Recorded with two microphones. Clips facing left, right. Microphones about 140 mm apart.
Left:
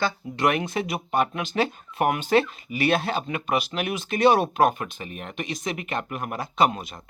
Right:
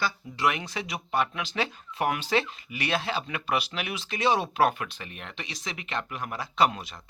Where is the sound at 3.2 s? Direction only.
40° left (ahead or behind); by 4.4 s 55° left (ahead or behind).